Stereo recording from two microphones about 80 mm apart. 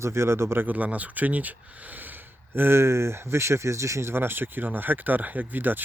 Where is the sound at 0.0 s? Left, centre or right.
Right.